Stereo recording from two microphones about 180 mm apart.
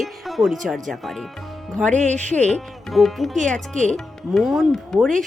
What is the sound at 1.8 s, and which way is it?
Speech, 40° right (ahead or behind).